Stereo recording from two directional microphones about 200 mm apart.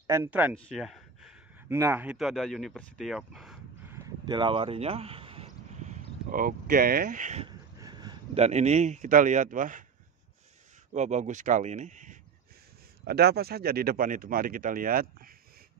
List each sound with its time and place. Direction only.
0.0 s speech: 15° right (ahead or behind)
0.6 s a sound: centre (ahead or behind)
1.7 s speech: 15° right (ahead or behind)
3.9 s a sound: 20° right (ahead or behind)
5.9 s speech: 45° right (ahead or behind)
7.4 s a sound: 20° right (ahead or behind)
8.4 s speech: 35° right (ahead or behind)
10.9 s speech: 35° right (ahead or behind)
13.0 s speech: 55° right (ahead or behind)